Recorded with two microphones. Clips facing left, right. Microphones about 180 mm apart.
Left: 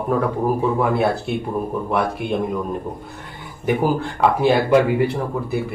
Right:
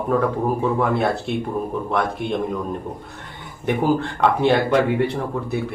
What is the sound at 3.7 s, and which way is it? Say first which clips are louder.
Speech: even; 5° left (ahead or behind).